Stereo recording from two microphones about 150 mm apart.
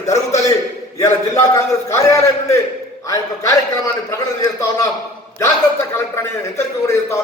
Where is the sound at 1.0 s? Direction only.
20° left (ahead or behind).